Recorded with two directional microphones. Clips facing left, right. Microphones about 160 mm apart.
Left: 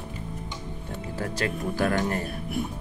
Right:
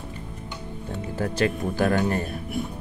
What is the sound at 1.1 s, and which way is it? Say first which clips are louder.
Speech: right 5 dB; 25° right (ahead or behind).